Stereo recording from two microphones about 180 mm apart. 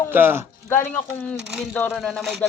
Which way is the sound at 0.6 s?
10° left (ahead or behind).